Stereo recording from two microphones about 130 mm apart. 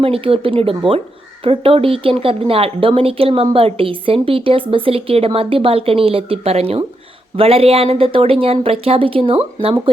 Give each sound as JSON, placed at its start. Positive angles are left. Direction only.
{"t": 0.0, "sound": "speech", "side_deg": -45}